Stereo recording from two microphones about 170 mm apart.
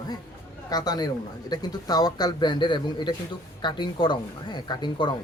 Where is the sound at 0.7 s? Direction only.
25° left (ahead or behind).